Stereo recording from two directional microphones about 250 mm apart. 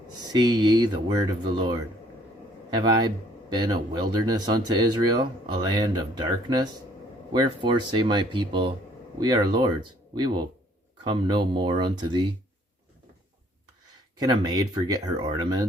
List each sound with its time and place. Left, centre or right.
0.3 s speech: centre
14.4 s speech: centre